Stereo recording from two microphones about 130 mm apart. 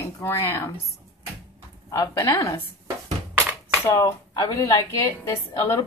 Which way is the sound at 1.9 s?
25° left (ahead or behind).